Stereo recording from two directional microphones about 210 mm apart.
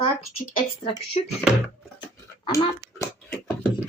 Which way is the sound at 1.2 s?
35° left (ahead or behind).